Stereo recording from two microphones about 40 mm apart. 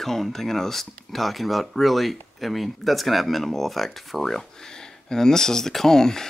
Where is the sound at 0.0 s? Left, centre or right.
Centre.